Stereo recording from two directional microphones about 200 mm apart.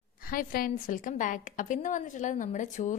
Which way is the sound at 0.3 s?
45° left (ahead or behind).